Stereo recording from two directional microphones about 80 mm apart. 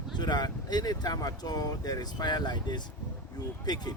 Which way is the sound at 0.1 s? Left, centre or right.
Left.